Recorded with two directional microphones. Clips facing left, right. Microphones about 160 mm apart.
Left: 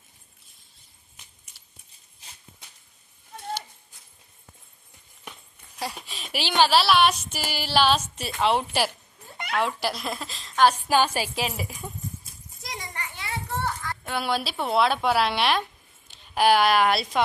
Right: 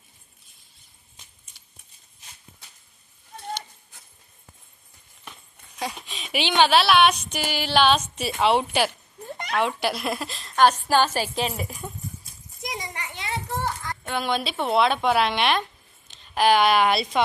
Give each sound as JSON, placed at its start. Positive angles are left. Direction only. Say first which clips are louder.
{"t": 5.7, "sound": "a sound", "louder": "right 2 dB", "side_deg": 5}
{"t": 6.5, "sound": "speech", "louder": "right 1 dB", "side_deg": 5}
{"t": 10.8, "sound": "a woman's voice", "louder": "right 1 dB", "side_deg": 10}
{"t": 11.8, "sound": "a sound", "louder": "right 1 dB", "side_deg": 5}
{"t": 12.6, "sound": "children playing", "louder": "right 3 dB", "side_deg": -20}
{"t": 14.0, "sound": "a woman's voice", "louder": "right 1 dB", "side_deg": 5}